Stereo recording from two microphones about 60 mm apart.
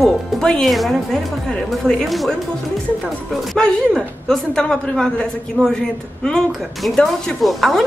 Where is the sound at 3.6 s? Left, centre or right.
Centre.